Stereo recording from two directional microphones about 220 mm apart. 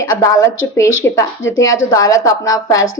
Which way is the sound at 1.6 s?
15° left (ahead or behind).